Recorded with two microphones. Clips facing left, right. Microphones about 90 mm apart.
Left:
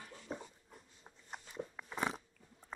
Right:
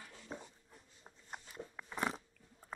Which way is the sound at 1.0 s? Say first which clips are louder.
Even; centre (ahead or behind).